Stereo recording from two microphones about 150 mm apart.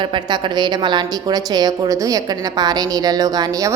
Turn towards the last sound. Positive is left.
turn(degrees=-20)  # may be behind; listen again after turning